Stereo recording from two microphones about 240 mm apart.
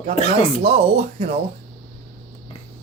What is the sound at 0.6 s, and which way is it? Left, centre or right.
Speech, right.